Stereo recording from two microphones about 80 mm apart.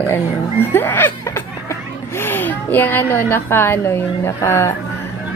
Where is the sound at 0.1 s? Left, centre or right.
Left.